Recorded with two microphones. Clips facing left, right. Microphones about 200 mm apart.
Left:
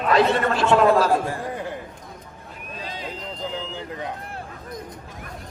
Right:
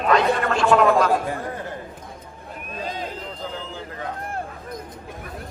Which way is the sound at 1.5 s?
15° left (ahead or behind).